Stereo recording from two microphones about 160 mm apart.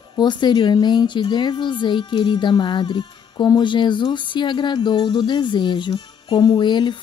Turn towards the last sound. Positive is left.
turn(degrees=30)  # may be behind; listen again after turning